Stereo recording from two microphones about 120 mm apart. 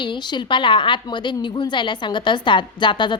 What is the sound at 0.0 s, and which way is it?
A woman's voice, 40° left (ahead or behind).